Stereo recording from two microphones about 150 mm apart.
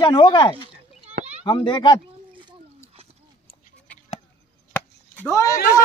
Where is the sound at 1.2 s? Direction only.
45° right (ahead or behind).